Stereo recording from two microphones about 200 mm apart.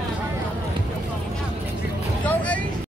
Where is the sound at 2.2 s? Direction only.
5° left (ahead or behind).